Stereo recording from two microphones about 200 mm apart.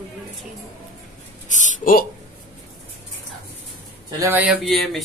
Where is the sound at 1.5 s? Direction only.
45° left (ahead or behind).